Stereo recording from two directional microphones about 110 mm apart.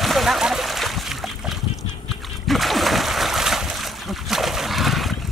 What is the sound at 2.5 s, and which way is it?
Splash, centre (ahead or behind).